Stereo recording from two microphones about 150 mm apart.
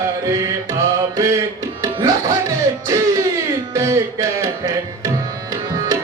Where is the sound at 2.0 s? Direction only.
20° right (ahead or behind).